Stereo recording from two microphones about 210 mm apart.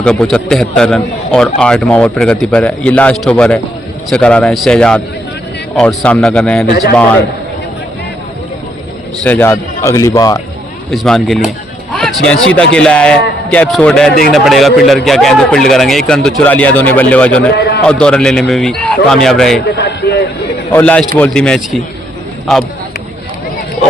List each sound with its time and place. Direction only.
0.0 s a man's voice: 5° left (ahead or behind)
9.2 s a man's voice: 10° left (ahead or behind)
10.9 s a man's voice: centre (ahead or behind)
14.1 s a man's voice: 45° left (ahead or behind)
14.3 s a man's voice: centre (ahead or behind)
17.5 s a man's voice: 50° left (ahead or behind)
17.8 s a man's voice: 5° left (ahead or behind)
19.7 s a man's voice: 55° left (ahead or behind)
20.7 s a man's voice: 5° left (ahead or behind)